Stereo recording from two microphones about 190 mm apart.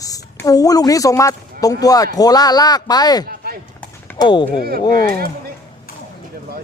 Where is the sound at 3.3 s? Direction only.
50° right (ahead or behind).